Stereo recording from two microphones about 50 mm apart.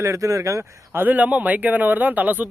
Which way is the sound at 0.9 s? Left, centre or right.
Right.